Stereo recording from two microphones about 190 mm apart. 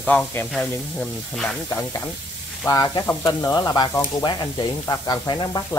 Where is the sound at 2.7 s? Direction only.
20° left (ahead or behind).